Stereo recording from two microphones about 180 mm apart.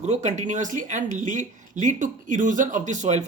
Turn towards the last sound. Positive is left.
turn(degrees=-40)  # may be behind; listen again after turning